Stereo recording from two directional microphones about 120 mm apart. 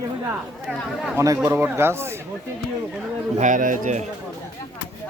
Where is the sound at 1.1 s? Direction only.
25° right (ahead or behind).